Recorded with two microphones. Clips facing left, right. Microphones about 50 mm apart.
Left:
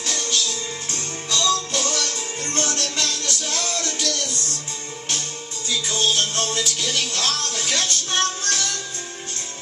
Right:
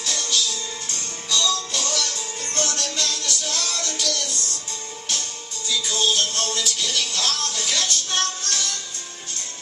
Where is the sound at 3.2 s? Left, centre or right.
Centre.